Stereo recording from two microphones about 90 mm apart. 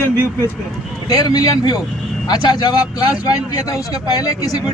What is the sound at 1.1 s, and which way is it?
A man's voice, 40° left (ahead or behind).